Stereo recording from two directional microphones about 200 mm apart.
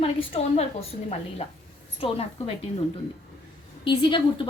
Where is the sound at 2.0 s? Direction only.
30° left (ahead or behind).